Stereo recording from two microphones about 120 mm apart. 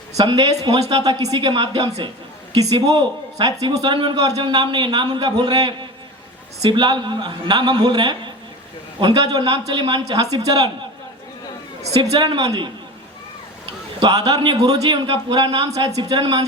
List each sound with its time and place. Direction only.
0.2 s speech: 40° right (ahead or behind)
12.2 s speech: 40° right (ahead or behind)
13.7 s speech: 40° right (ahead or behind)